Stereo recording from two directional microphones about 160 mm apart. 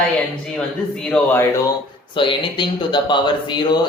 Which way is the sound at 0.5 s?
5° left (ahead or behind).